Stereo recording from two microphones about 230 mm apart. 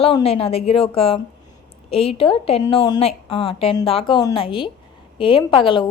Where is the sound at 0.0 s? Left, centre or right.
Left.